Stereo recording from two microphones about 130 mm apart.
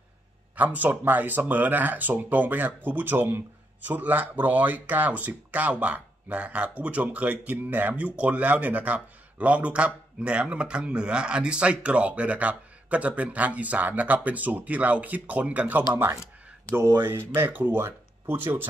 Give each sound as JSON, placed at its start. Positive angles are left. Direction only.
{"t": 0.6, "sound": "speech", "side_deg": -10}
{"t": 17.3, "sound": "speech", "side_deg": -15}